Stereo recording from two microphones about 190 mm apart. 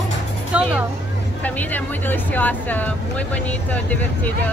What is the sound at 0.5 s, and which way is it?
Speech, 5° right (ahead or behind).